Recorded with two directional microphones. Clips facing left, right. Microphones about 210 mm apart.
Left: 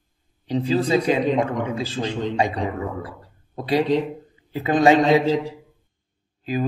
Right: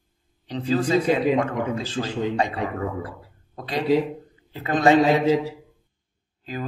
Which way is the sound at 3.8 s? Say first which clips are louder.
Right 1 dB; 5° right (ahead or behind).